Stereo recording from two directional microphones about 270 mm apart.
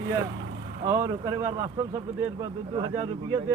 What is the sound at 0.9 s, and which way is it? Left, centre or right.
Speech, centre.